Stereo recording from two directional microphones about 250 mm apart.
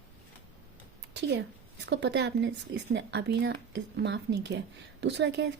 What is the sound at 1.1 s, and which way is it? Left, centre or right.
A woman's voice, right.